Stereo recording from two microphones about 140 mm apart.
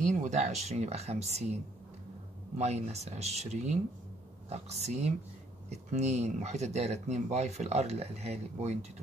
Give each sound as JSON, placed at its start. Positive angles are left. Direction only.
{"t": 0.0, "sound": "speech", "side_deg": -60}